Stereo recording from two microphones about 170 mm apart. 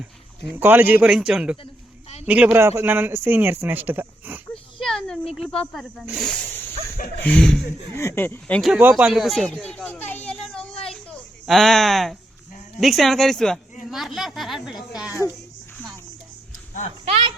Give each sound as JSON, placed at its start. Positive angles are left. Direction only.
{"t": 0.5, "sound": "a man's voice", "side_deg": -10}
{"t": 4.8, "sound": "a sound", "side_deg": 5}
{"t": 5.3, "sound": "speech", "side_deg": 5}
{"t": 8.7, "sound": "speech", "side_deg": -10}
{"t": 10.2, "sound": "a sound", "side_deg": 5}
{"t": 11.4, "sound": "speech", "side_deg": 0}
{"t": 17.1, "sound": "speech", "side_deg": -30}